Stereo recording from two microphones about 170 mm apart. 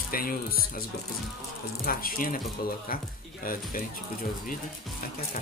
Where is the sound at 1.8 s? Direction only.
55° left (ahead or behind).